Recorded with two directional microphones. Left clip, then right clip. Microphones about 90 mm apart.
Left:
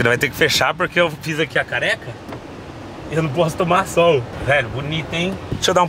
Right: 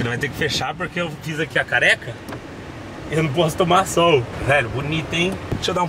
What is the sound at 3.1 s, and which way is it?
Speech, centre (ahead or behind).